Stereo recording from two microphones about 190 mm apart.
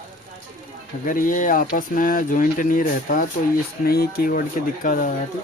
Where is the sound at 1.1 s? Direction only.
45° left (ahead or behind).